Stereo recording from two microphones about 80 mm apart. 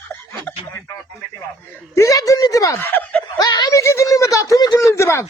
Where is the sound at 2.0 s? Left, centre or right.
Left.